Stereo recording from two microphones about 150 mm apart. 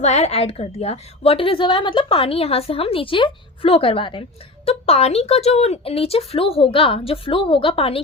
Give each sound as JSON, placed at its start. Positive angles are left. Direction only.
{"t": 0.0, "sound": "a woman's voice", "side_deg": 45}